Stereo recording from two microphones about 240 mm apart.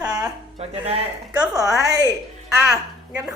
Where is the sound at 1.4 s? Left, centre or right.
Centre.